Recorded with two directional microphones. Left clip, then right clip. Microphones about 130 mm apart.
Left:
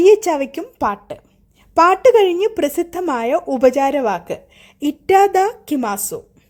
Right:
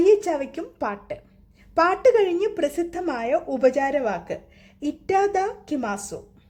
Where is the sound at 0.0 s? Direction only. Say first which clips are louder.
Left 6 dB; 30° left (ahead or behind).